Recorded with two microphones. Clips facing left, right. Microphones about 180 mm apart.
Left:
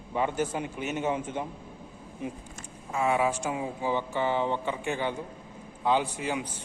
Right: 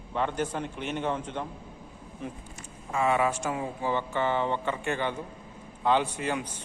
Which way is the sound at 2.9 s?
5° left (ahead or behind).